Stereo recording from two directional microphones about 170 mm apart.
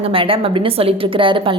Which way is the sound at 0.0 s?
30° right (ahead or behind).